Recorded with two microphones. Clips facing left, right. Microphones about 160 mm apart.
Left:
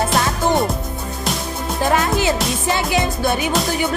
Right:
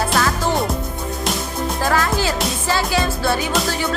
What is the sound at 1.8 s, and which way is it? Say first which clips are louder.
Music: left 3 dB; 20° left (ahead or behind).